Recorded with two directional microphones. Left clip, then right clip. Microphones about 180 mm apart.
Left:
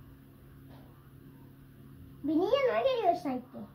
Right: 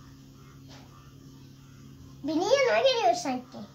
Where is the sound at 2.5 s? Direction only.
60° right (ahead or behind).